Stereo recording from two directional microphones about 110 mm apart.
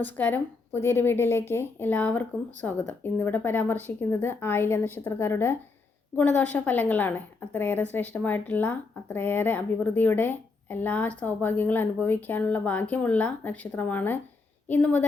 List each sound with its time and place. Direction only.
0.0 s a woman's voice: 15° left (ahead or behind)